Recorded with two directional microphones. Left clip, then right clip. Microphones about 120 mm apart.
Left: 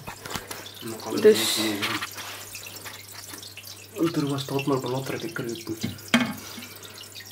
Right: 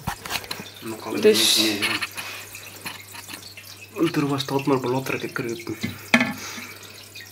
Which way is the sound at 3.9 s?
35° right (ahead or behind).